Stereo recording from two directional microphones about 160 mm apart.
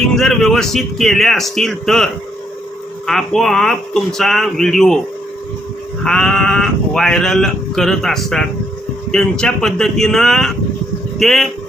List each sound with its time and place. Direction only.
0.2 s speech: centre (ahead or behind)
3.1 s speech: centre (ahead or behind)
6.0 s speech: 5° left (ahead or behind)